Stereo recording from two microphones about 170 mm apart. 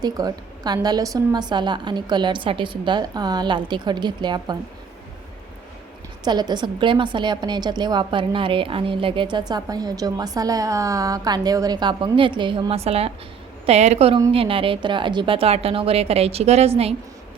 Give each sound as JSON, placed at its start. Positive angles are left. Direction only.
{"t": 0.0, "sound": "a woman's voice", "side_deg": -25}
{"t": 6.2, "sound": "a woman's voice", "side_deg": -25}